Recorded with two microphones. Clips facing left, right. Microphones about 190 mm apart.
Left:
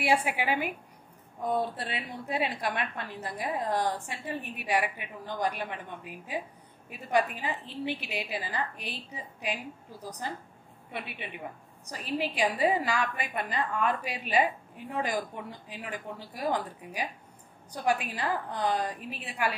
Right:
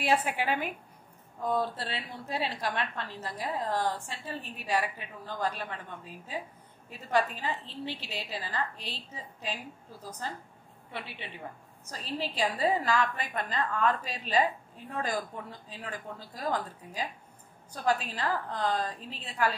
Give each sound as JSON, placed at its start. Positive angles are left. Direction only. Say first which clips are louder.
{"t": 0.0, "sound": "a woman's voice", "louder": "left 1 dB", "side_deg": 10}
{"t": 11.9, "sound": "a woman's voice", "louder": "left 3 dB", "side_deg": 15}